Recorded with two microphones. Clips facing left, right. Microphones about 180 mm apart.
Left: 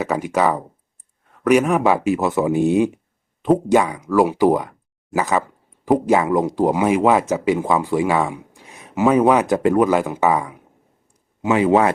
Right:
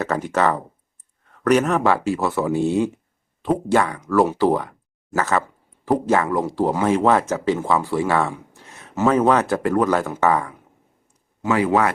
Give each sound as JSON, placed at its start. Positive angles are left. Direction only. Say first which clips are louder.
{"t": 0.0, "sound": "speech", "louder": "left 1 dB", "side_deg": 10}